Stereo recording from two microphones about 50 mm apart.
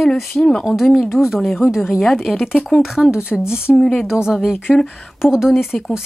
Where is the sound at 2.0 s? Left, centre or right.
Centre.